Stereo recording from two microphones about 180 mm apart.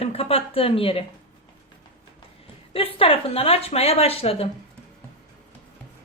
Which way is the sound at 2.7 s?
30° left (ahead or behind).